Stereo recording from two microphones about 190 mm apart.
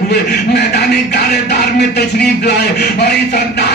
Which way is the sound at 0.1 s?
60° left (ahead or behind).